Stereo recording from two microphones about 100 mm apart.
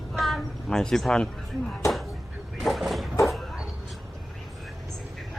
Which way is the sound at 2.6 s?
Centre (ahead or behind).